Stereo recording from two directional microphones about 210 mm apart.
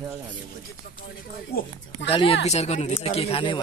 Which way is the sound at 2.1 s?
25° left (ahead or behind).